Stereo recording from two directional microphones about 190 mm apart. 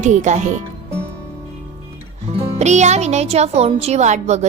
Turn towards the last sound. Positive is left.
turn(degrees=-35)  # may be behind; listen again after turning